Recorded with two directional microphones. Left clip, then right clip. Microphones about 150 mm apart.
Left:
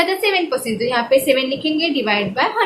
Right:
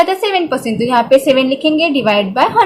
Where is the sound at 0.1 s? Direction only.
45° right (ahead or behind).